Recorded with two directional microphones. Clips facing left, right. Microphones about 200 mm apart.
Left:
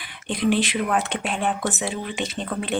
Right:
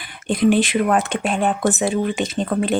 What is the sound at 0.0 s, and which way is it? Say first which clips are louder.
Speech: right 6 dB; 45° right (ahead or behind).